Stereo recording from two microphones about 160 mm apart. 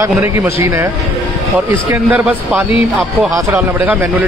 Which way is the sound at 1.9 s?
10° right (ahead or behind).